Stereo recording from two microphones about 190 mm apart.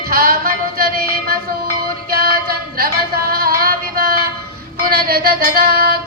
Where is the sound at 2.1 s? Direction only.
55° right (ahead or behind).